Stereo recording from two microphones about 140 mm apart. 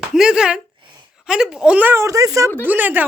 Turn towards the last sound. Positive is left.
turn(degrees=-15)  # may be behind; listen again after turning